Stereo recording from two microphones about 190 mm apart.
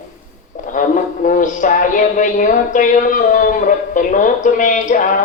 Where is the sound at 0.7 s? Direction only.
45° left (ahead or behind).